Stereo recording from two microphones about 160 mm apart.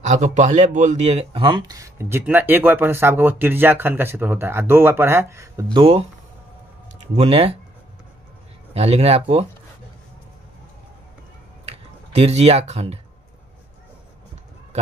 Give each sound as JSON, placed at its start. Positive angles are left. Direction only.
{"t": 0.0, "sound": "speech", "side_deg": -50}
{"t": 5.8, "sound": "speech", "side_deg": -40}
{"t": 7.2, "sound": "speech", "side_deg": -35}
{"t": 8.7, "sound": "speech", "side_deg": -40}
{"t": 11.6, "sound": "a sound", "side_deg": -40}